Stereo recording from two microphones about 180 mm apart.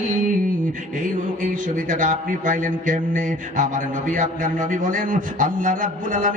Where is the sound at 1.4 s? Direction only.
45° right (ahead or behind).